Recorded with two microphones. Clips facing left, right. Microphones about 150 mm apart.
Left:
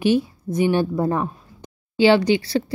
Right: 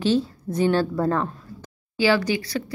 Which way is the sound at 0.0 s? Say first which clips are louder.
Left 2 dB; 10° left (ahead or behind).